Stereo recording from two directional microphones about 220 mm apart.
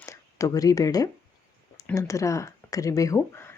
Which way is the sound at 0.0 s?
15° left (ahead or behind).